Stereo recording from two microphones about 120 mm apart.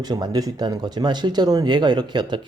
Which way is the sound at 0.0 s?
35° right (ahead or behind).